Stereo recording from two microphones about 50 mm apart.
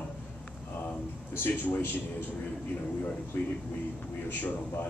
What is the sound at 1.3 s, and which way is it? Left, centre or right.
Speech, left.